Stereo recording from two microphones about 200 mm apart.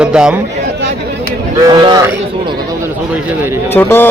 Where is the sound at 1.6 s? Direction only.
20° right (ahead or behind).